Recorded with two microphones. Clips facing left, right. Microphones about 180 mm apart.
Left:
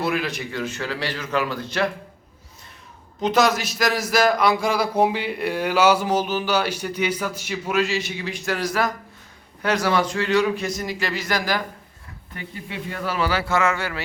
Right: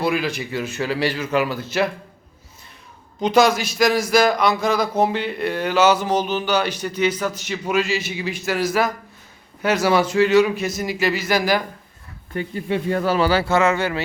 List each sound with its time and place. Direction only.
0.0 s a man's voice: centre (ahead or behind)
3.2 s a man's voice: centre (ahead or behind)
12.4 s speech: 45° right (ahead or behind); by 14.0 s 20° right (ahead or behind)